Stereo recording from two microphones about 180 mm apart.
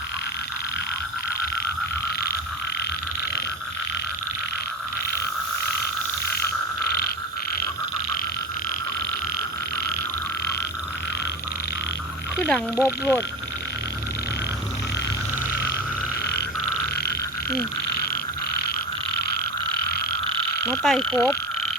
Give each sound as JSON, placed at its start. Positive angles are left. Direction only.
{"t": 12.4, "sound": "frog", "side_deg": 10}
{"t": 12.8, "sound": "speech", "side_deg": 15}
{"t": 20.7, "sound": "frog", "side_deg": 5}